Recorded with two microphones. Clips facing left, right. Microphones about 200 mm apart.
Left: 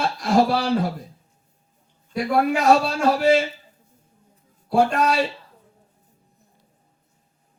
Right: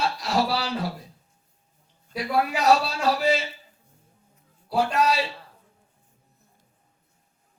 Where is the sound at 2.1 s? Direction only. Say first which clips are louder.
Left 5 dB; 50° left (ahead or behind).